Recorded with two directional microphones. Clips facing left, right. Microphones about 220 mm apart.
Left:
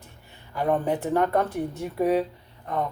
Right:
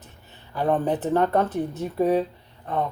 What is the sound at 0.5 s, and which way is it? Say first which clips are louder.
Speech: right 1 dB; 35° right (ahead or behind).